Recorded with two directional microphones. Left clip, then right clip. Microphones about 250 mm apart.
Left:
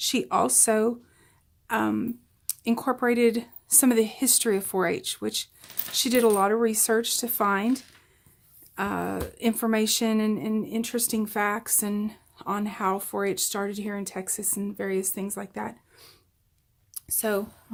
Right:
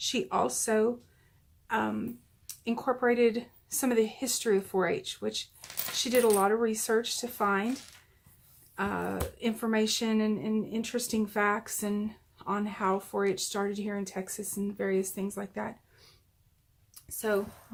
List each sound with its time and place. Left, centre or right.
0.0 s speech: left
8.7 s a sound: left
9.4 s speech: left